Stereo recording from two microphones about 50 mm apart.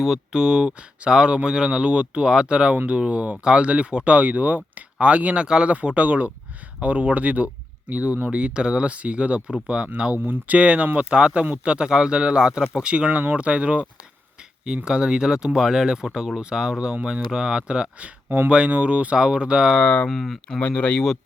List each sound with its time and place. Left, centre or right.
0.3 s speech: centre
14.8 s speech: centre
19.8 s speech: left
20.1 s speech: centre
20.6 s speech: left